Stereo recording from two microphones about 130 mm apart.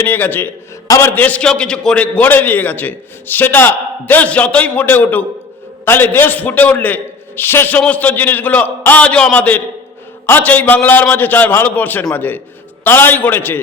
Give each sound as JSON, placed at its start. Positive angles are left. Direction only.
{"t": 0.0, "sound": "a man's voice", "side_deg": 15}